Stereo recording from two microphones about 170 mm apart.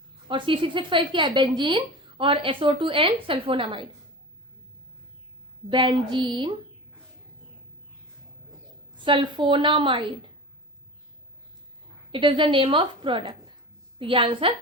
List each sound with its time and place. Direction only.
0.3 s a woman's voice: 30° right (ahead or behind)
5.7 s a woman's voice: 30° right (ahead or behind)
9.0 s a woman's voice: 30° right (ahead or behind)
12.1 s a woman's voice: 30° right (ahead or behind)